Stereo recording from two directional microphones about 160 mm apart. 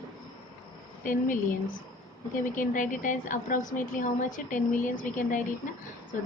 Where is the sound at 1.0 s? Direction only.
55° left (ahead or behind).